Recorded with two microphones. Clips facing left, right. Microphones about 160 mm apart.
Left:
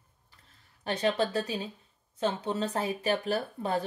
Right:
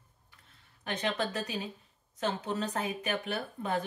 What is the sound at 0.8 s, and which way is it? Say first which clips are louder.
Speech: left 5 dB; 35° left (ahead or behind).